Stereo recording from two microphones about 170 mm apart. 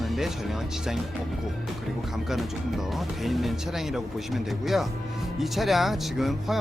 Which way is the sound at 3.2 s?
Centre (ahead or behind).